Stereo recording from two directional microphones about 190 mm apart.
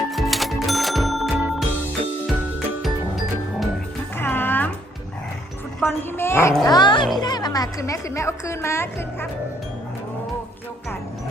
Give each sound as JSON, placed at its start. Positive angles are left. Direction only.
{"t": 0.1, "sound": "music", "side_deg": 0}
{"t": 4.2, "sound": "music", "side_deg": 10}
{"t": 5.8, "sound": "a woman's voice", "side_deg": 10}
{"t": 6.7, "sound": "a child's voice", "side_deg": 20}